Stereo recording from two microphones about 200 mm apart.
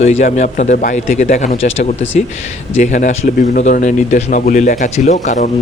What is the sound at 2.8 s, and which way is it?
Speech, 40° left (ahead or behind).